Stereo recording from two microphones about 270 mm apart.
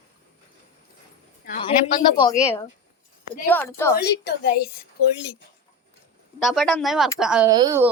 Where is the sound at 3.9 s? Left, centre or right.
Left.